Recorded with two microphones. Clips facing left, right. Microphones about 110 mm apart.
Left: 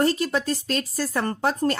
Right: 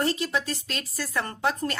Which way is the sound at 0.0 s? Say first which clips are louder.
Left 4 dB; 45° left (ahead or behind).